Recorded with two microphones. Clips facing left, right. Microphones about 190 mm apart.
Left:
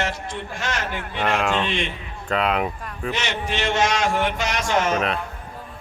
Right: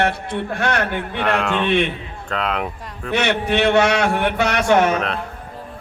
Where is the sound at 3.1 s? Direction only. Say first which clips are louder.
Right 8 dB; 60° right (ahead or behind).